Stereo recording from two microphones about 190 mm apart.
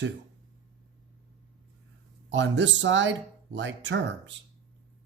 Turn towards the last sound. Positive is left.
turn(degrees=-70)  # may be behind; listen again after turning